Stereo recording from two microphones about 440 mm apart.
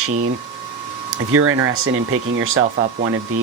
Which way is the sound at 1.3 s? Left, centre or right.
Right.